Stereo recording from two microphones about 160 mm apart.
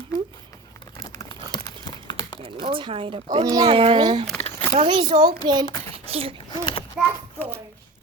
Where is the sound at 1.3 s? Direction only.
25° left (ahead or behind).